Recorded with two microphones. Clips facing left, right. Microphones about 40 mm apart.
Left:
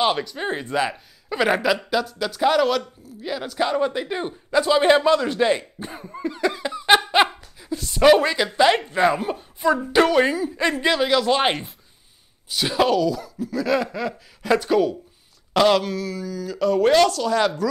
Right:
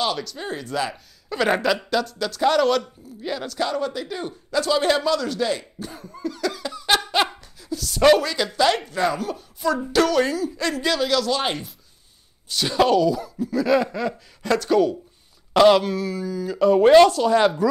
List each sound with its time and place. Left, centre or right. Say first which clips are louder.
0.0 s speech: left 4 dB; left
1.5 s a man's voice: even; centre
3.4 s a man's voice: left 4 dB; centre
12.4 s a man's voice: right 1 dB; centre
15.5 s speech: right 3 dB; centre